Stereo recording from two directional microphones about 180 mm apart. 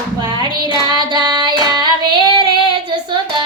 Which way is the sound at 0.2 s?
20° right (ahead or behind).